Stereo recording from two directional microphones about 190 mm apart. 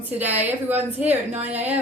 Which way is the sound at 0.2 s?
10° right (ahead or behind).